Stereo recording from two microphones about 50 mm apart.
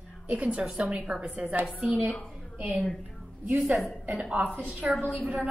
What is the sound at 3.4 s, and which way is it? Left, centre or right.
A woman's voice, right.